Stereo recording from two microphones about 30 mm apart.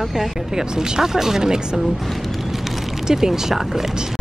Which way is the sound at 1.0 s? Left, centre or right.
Centre.